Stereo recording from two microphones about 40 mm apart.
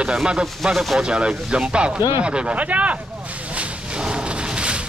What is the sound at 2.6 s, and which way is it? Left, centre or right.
Speech, right.